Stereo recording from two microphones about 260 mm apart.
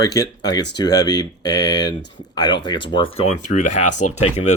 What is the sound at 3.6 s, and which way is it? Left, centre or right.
Speech, left.